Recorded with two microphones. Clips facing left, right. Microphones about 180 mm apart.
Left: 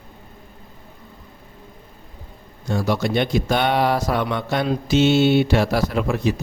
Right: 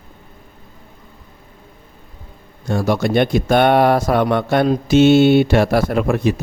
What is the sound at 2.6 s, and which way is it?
A man's voice, 55° right (ahead or behind).